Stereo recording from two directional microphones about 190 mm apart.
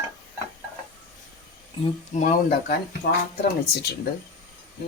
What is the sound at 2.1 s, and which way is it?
Speech, 45° left (ahead or behind).